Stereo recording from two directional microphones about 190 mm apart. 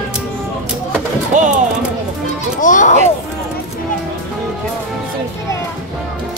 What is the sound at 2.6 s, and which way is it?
Speech, 40° left (ahead or behind).